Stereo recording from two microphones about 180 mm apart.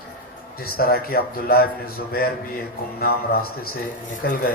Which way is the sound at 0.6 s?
55° left (ahead or behind).